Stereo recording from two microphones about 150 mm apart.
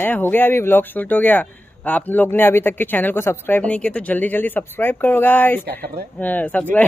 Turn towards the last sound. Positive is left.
turn(degrees=10)  # may be behind; listen again after turning